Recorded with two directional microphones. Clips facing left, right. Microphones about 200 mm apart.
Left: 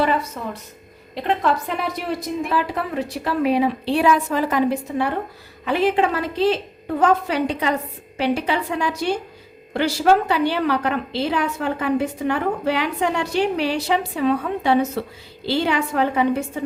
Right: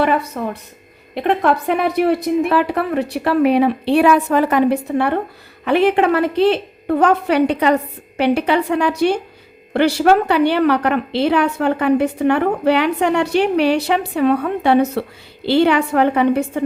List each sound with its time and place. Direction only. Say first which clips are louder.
0.4 s a woman's voice: right 6 dB; 55° right (ahead or behind)